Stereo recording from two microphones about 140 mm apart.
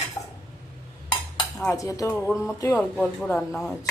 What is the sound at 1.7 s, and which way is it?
Speech, 25° left (ahead or behind).